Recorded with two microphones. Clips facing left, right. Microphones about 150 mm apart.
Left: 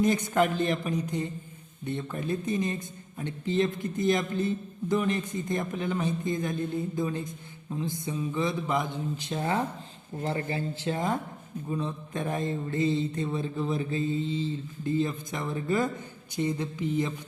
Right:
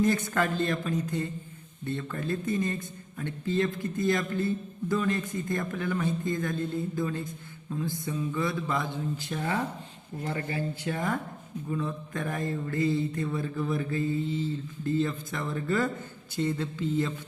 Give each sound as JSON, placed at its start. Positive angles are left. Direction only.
{"t": 0.0, "sound": "a man's voice", "side_deg": 20}